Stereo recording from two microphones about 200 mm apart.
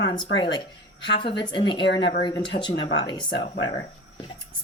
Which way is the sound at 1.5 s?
25° left (ahead or behind).